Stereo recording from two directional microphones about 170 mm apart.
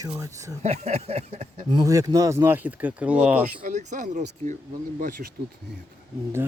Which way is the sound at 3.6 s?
45° right (ahead or behind).